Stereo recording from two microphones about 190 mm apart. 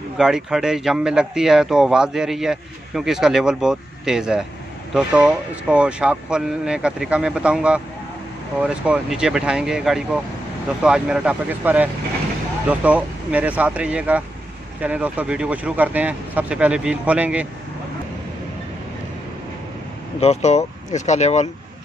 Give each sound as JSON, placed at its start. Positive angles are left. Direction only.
{"t": 0.2, "sound": "a man's voice", "side_deg": -5}
{"t": 20.2, "sound": "speech", "side_deg": 35}